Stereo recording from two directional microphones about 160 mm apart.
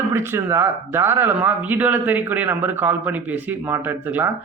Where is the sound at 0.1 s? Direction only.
15° right (ahead or behind).